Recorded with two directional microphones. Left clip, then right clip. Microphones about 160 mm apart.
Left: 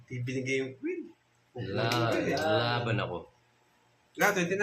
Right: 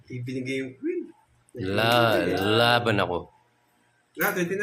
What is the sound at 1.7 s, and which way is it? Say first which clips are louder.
Speech: right 9 dB; 85° right.